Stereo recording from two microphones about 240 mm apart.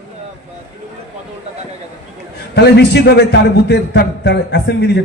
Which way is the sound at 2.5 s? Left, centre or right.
Left.